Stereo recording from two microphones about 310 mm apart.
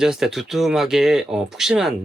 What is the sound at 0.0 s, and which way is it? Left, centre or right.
Speech, centre.